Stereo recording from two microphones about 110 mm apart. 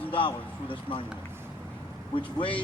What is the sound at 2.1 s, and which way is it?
Speech, 50° left (ahead or behind).